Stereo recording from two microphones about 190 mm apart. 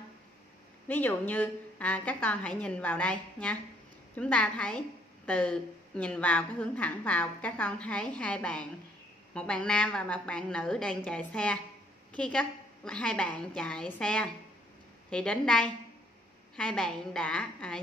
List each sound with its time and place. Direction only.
0.8 s a woman's voice: 10° left (ahead or behind)